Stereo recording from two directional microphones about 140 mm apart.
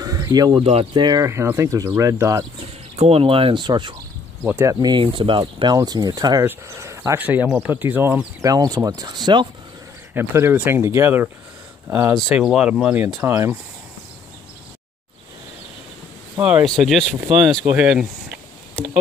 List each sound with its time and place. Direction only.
0.0 s a sound: 25° right (ahead or behind)
0.7 s speech: 40° right (ahead or behind)
1.2 s speech: 20° right (ahead or behind)
3.0 s speech: 45° right (ahead or behind)
4.5 s speech: 20° right (ahead or behind)
8.5 s speech: 25° right (ahead or behind)
10.1 s speech: 15° right (ahead or behind)
12.2 s speech: 5° right (ahead or behind)
16.3 s speech: 10° right (ahead or behind)
16.6 s speech: centre (ahead or behind)